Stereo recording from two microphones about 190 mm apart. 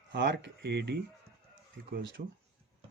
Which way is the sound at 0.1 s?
65° right (ahead or behind).